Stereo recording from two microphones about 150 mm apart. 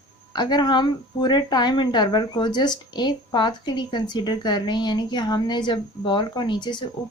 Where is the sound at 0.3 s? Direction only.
30° left (ahead or behind).